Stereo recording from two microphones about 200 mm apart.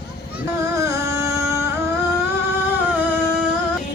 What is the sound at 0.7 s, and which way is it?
Music, 15° right (ahead or behind).